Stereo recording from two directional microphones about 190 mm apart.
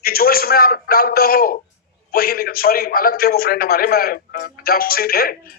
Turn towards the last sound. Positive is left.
turn(degrees=50)  # may be behind; listen again after turning